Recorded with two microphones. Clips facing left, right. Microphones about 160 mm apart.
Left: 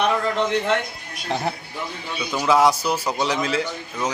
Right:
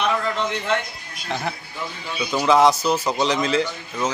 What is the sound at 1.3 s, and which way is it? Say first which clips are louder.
Speech: left 2 dB; 35° left (ahead or behind).